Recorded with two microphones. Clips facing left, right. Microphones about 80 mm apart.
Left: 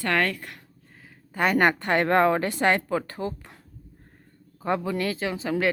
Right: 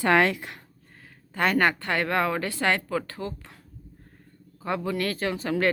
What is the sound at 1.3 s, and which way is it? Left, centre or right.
Speech, centre.